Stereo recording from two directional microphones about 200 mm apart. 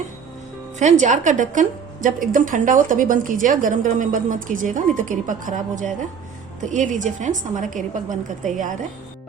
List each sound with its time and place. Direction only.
0.8 s a woman's voice: 35° right (ahead or behind)